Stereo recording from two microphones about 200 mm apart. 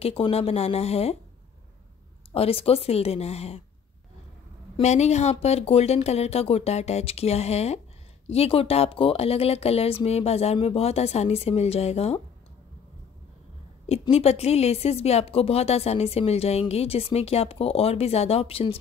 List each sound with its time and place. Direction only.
0.0 s speech: 30° left (ahead or behind)
2.3 s speech: 30° left (ahead or behind)
4.7 s speech: 35° left (ahead or behind)
13.8 s speech: 30° left (ahead or behind)